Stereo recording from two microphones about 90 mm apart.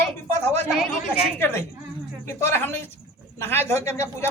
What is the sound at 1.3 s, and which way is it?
A man's voice, 25° left (ahead or behind).